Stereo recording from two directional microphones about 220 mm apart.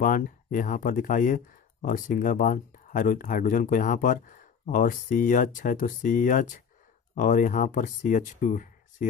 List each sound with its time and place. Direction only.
0.0 s speech: 40° left (ahead or behind)